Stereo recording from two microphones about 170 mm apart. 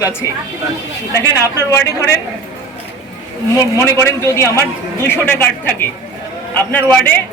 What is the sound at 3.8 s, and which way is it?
Speech, 15° left (ahead or behind).